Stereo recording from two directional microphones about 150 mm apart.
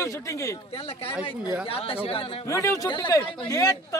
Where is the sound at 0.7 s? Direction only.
40° left (ahead or behind).